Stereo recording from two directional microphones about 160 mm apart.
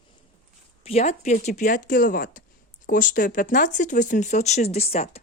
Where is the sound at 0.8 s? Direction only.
40° left (ahead or behind).